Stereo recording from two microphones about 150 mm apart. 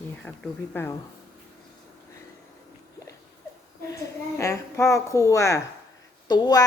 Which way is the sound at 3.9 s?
20° left (ahead or behind).